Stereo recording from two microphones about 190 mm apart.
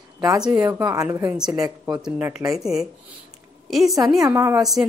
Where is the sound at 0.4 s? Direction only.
10° right (ahead or behind).